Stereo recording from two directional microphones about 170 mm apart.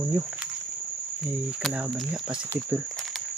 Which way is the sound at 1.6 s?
5° right (ahead or behind).